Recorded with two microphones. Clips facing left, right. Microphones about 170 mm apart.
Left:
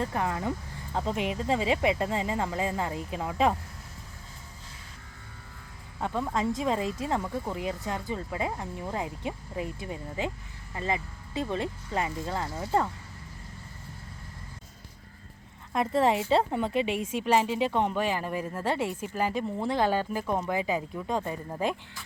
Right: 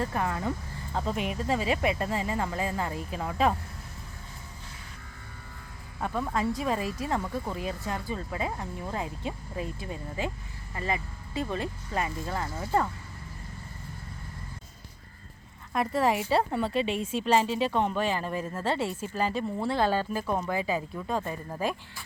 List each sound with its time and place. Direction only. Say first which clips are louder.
0.0 s speech: even; 20° left (ahead or behind)
6.0 s speech: even; 20° left (ahead or behind)
15.7 s speech: left 1 dB; 20° left (ahead or behind)